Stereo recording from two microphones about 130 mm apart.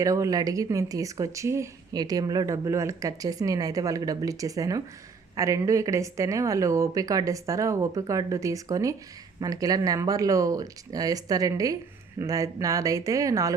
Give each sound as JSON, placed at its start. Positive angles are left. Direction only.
{"t": 0.0, "sound": "speech", "side_deg": -25}